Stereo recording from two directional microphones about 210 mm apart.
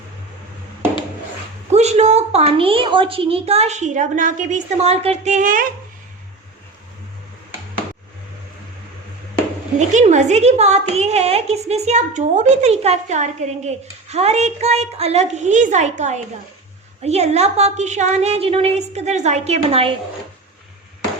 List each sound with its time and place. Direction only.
1.7 s a woman's voice: 30° right (ahead or behind)
9.7 s a woman's voice: 35° right (ahead or behind)